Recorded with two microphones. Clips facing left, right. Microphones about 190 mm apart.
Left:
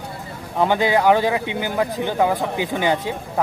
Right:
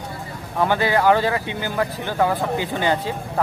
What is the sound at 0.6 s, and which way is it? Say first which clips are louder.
Speech: left 1 dB; 15° left (ahead or behind).